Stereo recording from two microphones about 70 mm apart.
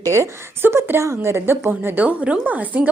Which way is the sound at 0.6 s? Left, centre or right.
Right.